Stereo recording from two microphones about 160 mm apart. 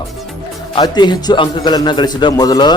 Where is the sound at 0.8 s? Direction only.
25° left (ahead or behind).